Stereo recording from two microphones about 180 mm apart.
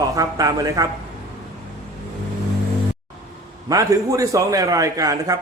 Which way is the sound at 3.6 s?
20° right (ahead or behind).